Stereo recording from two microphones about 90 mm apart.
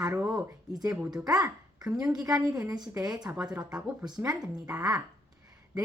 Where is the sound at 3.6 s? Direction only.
45° right (ahead or behind).